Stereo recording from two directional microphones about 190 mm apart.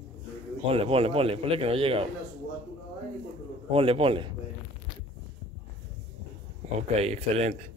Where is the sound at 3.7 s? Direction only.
30° right (ahead or behind).